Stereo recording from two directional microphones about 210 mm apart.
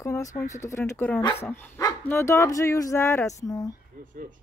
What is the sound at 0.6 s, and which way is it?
Speech, 15° left (ahead or behind).